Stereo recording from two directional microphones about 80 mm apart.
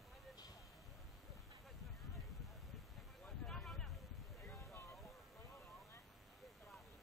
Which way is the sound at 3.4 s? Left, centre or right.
Centre.